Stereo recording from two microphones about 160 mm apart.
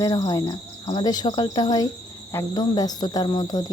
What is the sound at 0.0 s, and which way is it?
Speech, 20° left (ahead or behind).